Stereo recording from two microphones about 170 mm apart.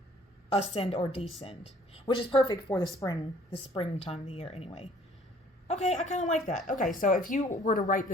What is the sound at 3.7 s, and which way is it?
Speech, 35° left (ahead or behind).